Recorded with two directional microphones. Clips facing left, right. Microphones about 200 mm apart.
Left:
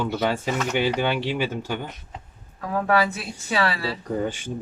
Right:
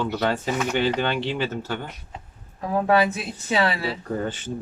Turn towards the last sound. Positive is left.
turn(degrees=10)  # may be behind; listen again after turning